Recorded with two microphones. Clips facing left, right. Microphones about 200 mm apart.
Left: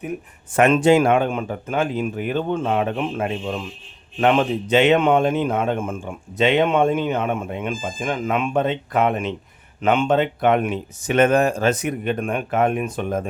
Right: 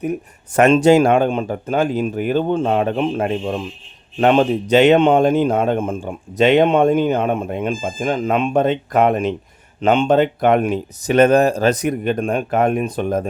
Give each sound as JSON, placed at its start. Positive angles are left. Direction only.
{"t": 0.8, "sound": "a man's voice", "side_deg": -40}